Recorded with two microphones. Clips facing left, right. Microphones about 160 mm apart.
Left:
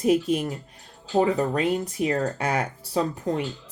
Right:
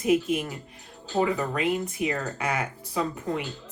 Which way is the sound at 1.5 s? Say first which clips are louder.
Left 2 dB; 35° left (ahead or behind).